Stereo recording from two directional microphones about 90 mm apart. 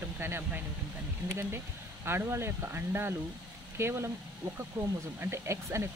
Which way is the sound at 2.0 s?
25° right (ahead or behind).